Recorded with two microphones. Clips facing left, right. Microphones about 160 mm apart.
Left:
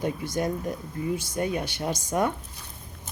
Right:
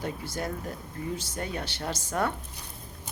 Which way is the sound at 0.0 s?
15° left (ahead or behind).